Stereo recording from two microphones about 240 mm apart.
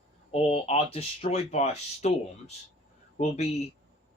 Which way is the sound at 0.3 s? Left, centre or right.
Left.